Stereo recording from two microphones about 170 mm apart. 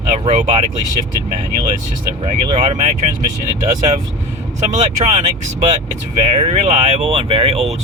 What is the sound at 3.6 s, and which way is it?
Speech, 45° right (ahead or behind).